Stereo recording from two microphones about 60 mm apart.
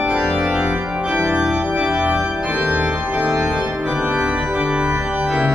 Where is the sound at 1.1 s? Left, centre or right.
Centre.